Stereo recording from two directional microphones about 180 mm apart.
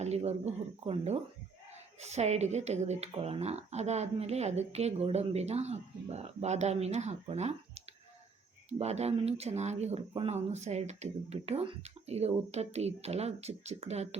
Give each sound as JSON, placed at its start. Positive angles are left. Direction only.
{"t": 0.0, "sound": "a woman's voice", "side_deg": -35}
{"t": 8.8, "sound": "a woman's voice", "side_deg": -35}